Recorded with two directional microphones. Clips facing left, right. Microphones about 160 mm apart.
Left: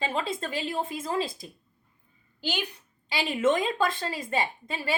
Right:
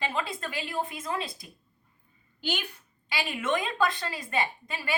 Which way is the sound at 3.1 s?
25° left (ahead or behind).